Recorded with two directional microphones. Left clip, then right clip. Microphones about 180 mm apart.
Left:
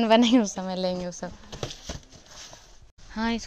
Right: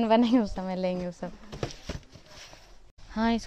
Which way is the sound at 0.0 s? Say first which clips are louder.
Left 3 dB; 5° left (ahead or behind).